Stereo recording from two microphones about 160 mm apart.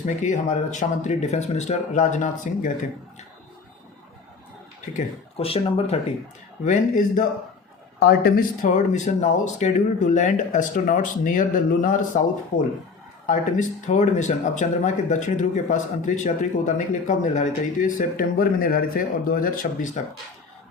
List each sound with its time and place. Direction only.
0.0 s speech: 50° left (ahead or behind)
5.4 s speech: 35° left (ahead or behind)
6.7 s speech: 55° left (ahead or behind)
7.9 s speech: 80° left
8.6 s speech: 50° left (ahead or behind)